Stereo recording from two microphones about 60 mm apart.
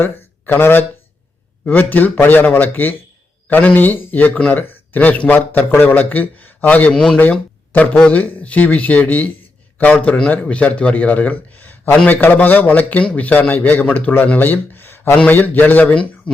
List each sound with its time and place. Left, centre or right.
0.0 s speech: left
6.9 s speech: centre
7.2 s speech: left